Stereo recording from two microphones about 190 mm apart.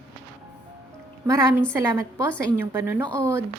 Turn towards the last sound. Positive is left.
turn(degrees=-15)  # may be behind; listen again after turning